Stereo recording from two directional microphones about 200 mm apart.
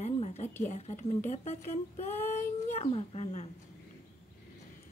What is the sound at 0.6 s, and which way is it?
Speech, 35° left (ahead or behind).